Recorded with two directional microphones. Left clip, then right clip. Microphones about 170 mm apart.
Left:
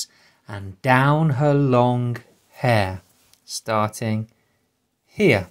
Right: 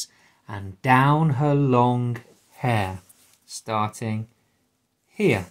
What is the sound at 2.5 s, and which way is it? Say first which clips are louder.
Speech: left 5 dB; 30° left (ahead or behind).